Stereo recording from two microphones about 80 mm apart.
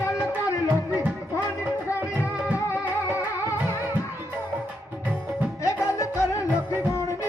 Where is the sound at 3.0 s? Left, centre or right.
Right.